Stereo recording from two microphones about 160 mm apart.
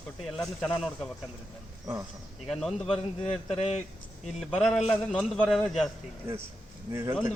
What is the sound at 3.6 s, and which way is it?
Speech, 45° left (ahead or behind).